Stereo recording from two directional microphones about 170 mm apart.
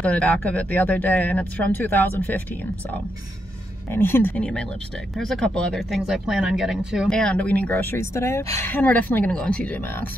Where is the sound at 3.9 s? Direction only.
15° left (ahead or behind).